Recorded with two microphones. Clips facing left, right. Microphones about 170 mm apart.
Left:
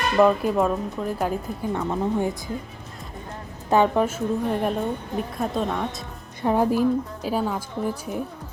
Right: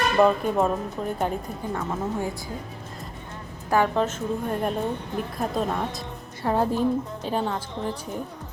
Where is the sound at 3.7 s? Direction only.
20° left (ahead or behind).